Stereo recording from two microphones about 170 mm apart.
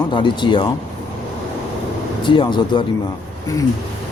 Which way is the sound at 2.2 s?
30° left (ahead or behind).